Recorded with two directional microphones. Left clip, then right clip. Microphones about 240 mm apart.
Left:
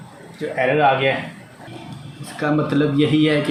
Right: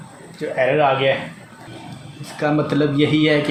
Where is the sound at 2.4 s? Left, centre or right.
Centre.